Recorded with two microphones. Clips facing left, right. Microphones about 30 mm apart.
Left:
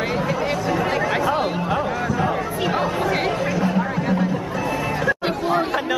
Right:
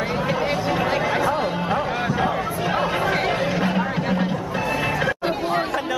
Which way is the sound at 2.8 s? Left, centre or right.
Centre.